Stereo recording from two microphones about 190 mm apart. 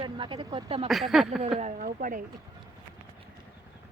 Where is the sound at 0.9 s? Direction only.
Centre (ahead or behind).